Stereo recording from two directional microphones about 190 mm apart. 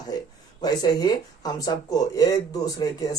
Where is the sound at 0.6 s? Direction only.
20° left (ahead or behind).